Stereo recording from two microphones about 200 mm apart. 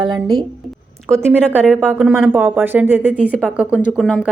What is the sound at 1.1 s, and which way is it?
A woman's voice, 15° right (ahead or behind).